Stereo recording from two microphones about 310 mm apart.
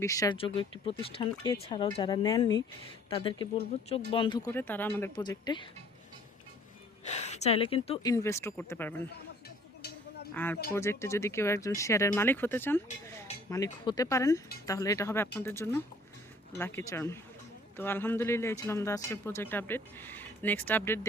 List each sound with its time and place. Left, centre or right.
0.0 s speech: centre
7.1 s speech: left; by 9.0 s centre
10.3 s speech: centre